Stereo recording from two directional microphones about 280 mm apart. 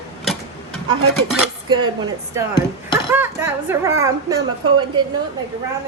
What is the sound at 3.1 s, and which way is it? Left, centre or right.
Speech, centre.